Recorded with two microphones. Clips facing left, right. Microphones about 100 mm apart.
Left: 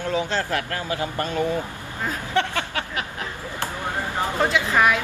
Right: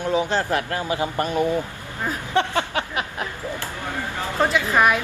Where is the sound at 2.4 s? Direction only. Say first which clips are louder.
Right 3 dB; 20° right (ahead or behind).